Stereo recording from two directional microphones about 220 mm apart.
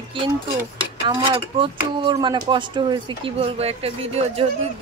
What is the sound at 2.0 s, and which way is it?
Speech, 20° right (ahead or behind).